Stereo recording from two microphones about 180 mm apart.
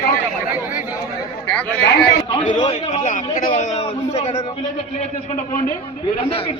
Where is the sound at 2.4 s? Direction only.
40° left (ahead or behind).